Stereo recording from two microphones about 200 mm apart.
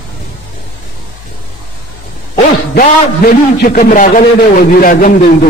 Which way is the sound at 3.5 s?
40° left (ahead or behind).